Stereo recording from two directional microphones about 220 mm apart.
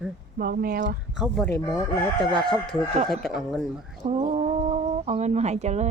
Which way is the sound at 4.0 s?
25° right (ahead or behind).